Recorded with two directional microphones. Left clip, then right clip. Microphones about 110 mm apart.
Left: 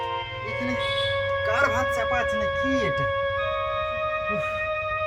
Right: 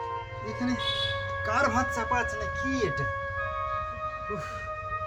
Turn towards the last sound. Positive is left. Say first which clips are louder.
# left 8 dB
turn(degrees=35)  # may be behind; listen again after turning